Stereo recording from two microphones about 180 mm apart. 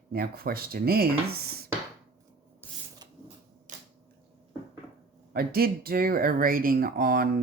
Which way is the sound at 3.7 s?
45° right (ahead or behind).